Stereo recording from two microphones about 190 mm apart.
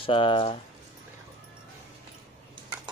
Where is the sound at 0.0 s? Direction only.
25° left (ahead or behind).